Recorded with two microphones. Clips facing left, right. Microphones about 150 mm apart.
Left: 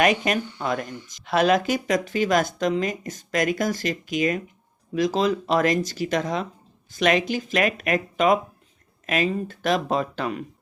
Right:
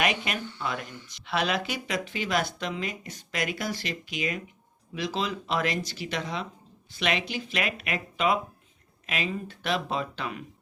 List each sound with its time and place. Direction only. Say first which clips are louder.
0.0 s speech: left 7 dB; 45° left (ahead or behind)